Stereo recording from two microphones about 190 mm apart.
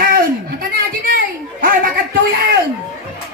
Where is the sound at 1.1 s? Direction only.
50° right (ahead or behind).